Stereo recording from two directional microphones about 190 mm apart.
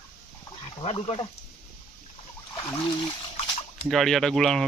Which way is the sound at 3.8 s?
Centre (ahead or behind).